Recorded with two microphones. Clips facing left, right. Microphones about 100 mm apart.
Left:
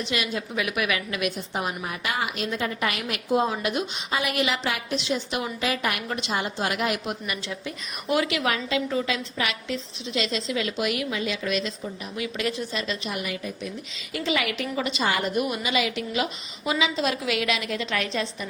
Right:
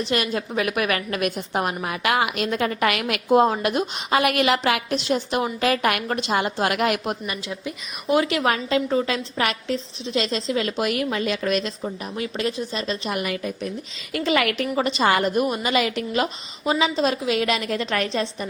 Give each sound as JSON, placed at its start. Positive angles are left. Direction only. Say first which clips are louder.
{"t": 0.1, "sound": "a woman's voice", "louder": "right 5 dB", "side_deg": -45}
{"t": 1.6, "sound": "a woman's voice", "louder": "right 5 dB", "side_deg": -75}
{"t": 5.5, "sound": "a woman's voice", "louder": "right 6 dB", "side_deg": -55}
{"t": 6.3, "sound": "a woman's voice", "louder": "right 5 dB", "side_deg": -65}
{"t": 7.4, "sound": "a woman's voice", "louder": "right 2 dB", "side_deg": -15}
{"t": 8.1, "sound": "a woman's voice", "louder": "right 4 dB", "side_deg": -35}
{"t": 13.1, "sound": "a woman's voice", "louder": "right 5 dB", "side_deg": -55}
{"t": 14.8, "sound": "a woman's voice", "louder": "right 6 dB", "side_deg": -40}
{"t": 15.7, "sound": "a woman's voice", "louder": "right 4 dB", "side_deg": -45}